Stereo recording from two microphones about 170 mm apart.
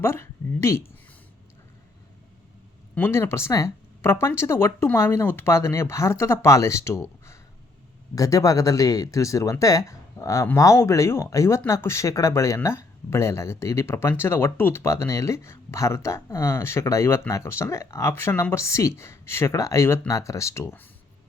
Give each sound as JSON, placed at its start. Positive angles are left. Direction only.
{"t": 0.0, "sound": "speech", "side_deg": 15}
{"t": 2.9, "sound": "speech", "side_deg": 15}